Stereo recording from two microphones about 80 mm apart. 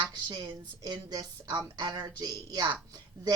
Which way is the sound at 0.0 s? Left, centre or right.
Right.